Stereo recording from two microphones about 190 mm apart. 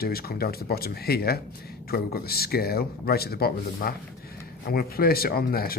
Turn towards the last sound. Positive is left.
turn(degrees=50)  # may be behind; listen again after turning